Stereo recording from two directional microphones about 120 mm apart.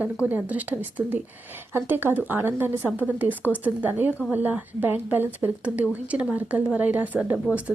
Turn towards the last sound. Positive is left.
turn(degrees=-15)  # may be behind; listen again after turning